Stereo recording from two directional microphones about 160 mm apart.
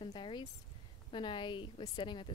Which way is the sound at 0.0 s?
30° left (ahead or behind).